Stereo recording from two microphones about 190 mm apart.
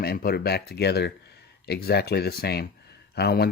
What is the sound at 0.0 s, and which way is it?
Speech, 55° left (ahead or behind).